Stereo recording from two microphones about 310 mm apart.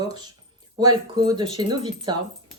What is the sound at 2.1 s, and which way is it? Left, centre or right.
Speech, centre.